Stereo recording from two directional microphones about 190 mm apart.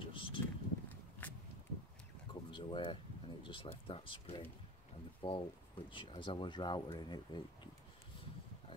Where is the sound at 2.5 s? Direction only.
25° left (ahead or behind).